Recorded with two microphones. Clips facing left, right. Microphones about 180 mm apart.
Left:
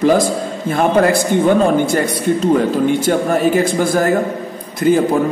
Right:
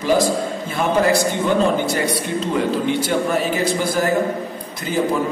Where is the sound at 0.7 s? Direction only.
50° left (ahead or behind).